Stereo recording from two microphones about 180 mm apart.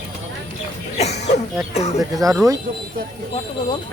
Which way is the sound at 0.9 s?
40° left (ahead or behind).